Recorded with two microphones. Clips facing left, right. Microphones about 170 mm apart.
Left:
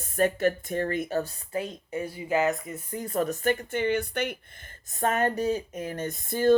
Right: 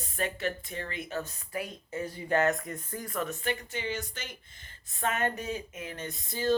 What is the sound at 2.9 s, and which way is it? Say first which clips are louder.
Speech: left 7 dB; 25° left (ahead or behind).